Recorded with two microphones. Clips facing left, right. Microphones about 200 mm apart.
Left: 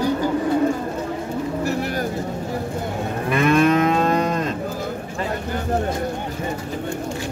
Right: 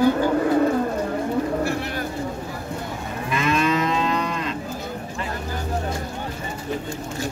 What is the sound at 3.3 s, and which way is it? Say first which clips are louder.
Moo: left 5 dB; 55° left (ahead or behind).